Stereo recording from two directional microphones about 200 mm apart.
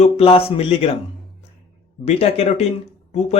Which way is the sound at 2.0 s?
30° left (ahead or behind).